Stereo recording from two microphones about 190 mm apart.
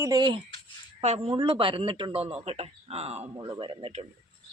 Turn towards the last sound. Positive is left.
turn(degrees=-30)  # may be behind; listen again after turning